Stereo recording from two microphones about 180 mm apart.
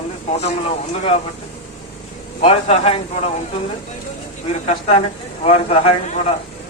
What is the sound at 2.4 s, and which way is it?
Speech, 35° left (ahead or behind).